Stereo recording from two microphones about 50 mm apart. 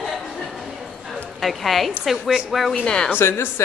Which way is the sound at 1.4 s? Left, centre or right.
Centre.